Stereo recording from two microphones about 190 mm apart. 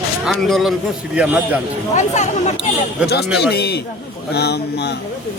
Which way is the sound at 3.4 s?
60° left (ahead or behind).